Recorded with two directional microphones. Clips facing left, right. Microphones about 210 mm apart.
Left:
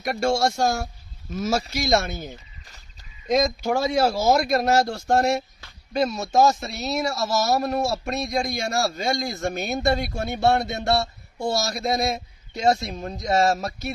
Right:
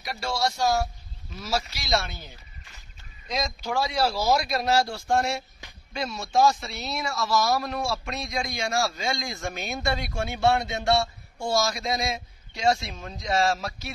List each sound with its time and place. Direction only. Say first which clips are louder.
0.0 s speech: left 7 dB; 50° left (ahead or behind)